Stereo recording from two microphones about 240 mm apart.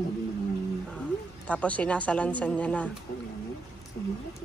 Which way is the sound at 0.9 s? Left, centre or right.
Centre.